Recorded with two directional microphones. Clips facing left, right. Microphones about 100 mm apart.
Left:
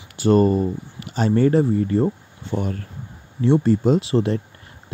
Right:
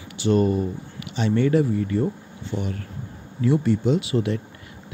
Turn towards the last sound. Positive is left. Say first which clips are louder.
# left 3 dB
turn(degrees=35)  # may be behind; listen again after turning